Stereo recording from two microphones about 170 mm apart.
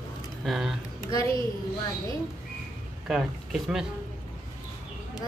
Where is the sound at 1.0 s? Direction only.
20° left (ahead or behind).